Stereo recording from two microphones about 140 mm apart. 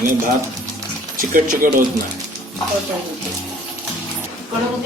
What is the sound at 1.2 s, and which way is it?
Speech, 80° right.